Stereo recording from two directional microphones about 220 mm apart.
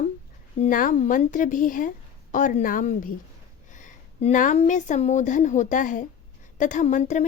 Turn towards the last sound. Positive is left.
turn(degrees=35)  # may be behind; listen again after turning